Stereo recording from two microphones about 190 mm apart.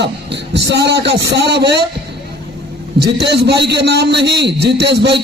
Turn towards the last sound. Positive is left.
turn(degrees=-60)  # may be behind; listen again after turning